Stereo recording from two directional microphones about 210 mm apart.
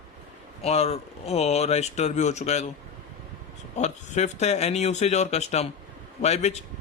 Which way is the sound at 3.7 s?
35° left (ahead or behind).